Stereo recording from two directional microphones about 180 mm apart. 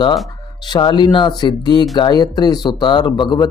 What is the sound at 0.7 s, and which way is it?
Speech, 25° left (ahead or behind).